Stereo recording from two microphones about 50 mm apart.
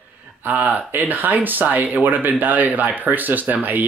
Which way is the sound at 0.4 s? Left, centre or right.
Right.